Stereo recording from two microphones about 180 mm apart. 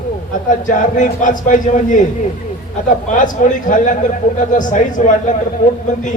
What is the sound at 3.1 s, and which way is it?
A man's voice, 45° left (ahead or behind).